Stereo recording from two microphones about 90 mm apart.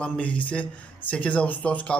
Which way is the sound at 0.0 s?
15° left (ahead or behind).